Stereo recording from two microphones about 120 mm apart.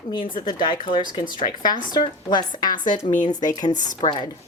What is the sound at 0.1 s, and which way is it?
A woman's voice, 45° left (ahead or behind).